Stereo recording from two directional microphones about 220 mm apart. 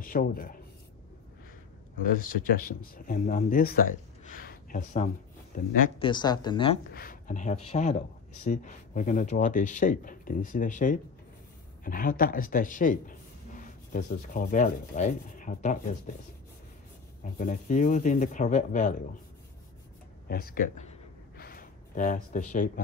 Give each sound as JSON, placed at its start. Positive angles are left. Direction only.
{"t": 0.0, "sound": "speech", "side_deg": 40}
{"t": 2.0, "sound": "speech", "side_deg": 40}
{"t": 5.9, "sound": "speech", "side_deg": 20}
{"t": 6.9, "sound": "speech", "side_deg": 40}
{"t": 17.2, "sound": "speech", "side_deg": 35}
{"t": 20.2, "sound": "speech", "side_deg": 45}
{"t": 21.4, "sound": "a sound", "side_deg": 40}